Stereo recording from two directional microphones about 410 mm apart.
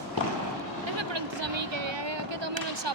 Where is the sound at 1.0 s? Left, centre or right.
Right.